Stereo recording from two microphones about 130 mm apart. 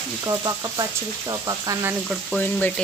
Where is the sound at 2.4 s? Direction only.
10° left (ahead or behind).